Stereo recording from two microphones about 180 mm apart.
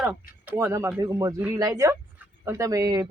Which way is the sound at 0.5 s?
15° right (ahead or behind).